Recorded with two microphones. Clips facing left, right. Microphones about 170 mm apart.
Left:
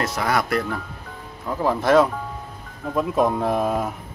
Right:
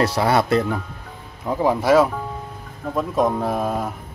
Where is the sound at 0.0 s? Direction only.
30° right (ahead or behind); by 3.9 s centre (ahead or behind).